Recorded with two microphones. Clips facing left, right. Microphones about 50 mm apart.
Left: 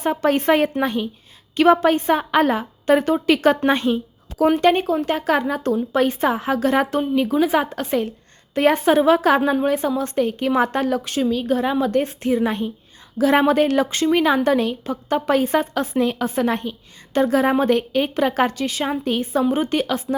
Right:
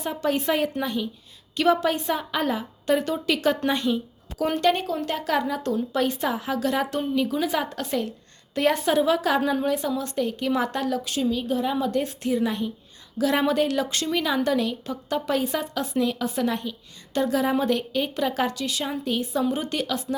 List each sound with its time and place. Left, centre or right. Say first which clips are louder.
0.0 s a woman's voice: left 6 dB; left
11.2 s a woman's voice: left 5 dB; left